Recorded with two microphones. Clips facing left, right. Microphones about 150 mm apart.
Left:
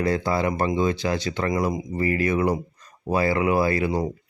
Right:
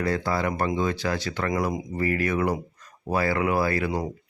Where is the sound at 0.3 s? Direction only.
20° left (ahead or behind).